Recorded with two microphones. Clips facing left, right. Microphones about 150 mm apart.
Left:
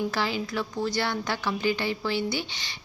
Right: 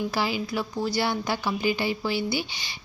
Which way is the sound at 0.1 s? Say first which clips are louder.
Right 1 dB; 10° right (ahead or behind).